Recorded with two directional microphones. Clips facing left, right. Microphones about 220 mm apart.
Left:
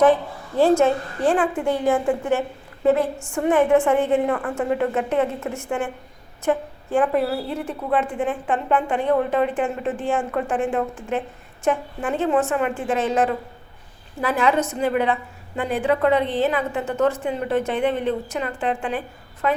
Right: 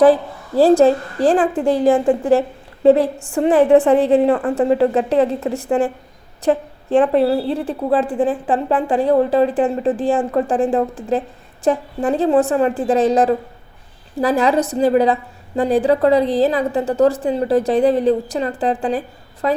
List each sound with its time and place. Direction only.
0.0 s a woman's voice: 35° right (ahead or behind)